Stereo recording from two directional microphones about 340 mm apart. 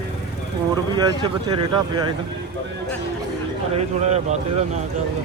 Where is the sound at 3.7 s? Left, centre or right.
Centre.